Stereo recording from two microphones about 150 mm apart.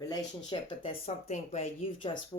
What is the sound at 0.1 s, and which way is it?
Speech, 30° left (ahead or behind).